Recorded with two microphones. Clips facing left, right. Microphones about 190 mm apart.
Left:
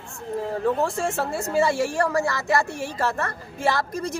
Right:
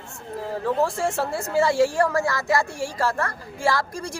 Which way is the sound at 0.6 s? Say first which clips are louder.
Right 1 dB; 15° left (ahead or behind).